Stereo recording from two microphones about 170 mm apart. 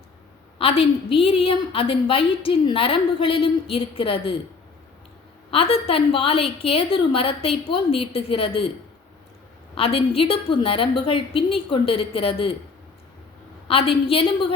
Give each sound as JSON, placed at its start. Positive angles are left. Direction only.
{"t": 0.6, "sound": "a woman's voice", "side_deg": 35}
{"t": 5.5, "sound": "a woman's voice", "side_deg": 35}
{"t": 9.7, "sound": "a woman's voice", "side_deg": 35}
{"t": 13.7, "sound": "a woman's voice", "side_deg": 35}